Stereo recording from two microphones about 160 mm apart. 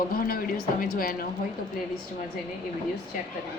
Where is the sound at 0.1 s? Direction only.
65° left (ahead or behind).